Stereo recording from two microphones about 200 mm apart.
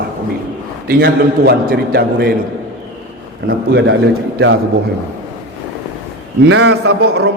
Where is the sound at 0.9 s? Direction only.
55° right (ahead or behind).